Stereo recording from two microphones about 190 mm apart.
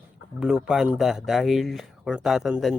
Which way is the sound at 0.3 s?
5° right (ahead or behind).